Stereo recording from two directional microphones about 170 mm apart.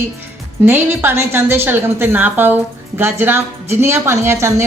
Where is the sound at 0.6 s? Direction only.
15° right (ahead or behind).